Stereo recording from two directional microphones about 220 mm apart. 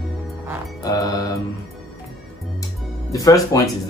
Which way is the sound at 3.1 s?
15° left (ahead or behind).